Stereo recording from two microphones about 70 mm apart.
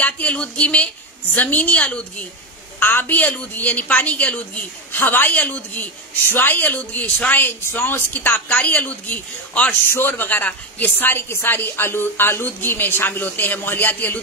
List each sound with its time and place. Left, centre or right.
0.0 s a woman's voice: centre
2.8 s a woman's voice: left
9.8 s a woman's voice: left